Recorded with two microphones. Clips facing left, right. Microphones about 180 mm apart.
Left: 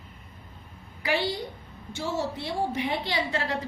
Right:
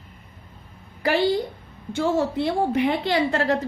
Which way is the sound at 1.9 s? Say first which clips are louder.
Right 8 dB; 55° right (ahead or behind).